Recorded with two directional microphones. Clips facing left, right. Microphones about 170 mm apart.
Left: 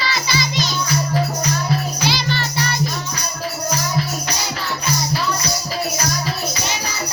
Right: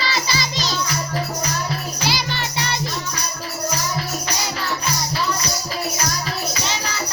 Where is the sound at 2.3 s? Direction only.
20° right (ahead or behind).